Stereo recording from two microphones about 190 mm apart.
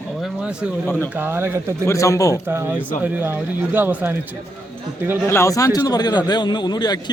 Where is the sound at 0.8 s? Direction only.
10° left (ahead or behind).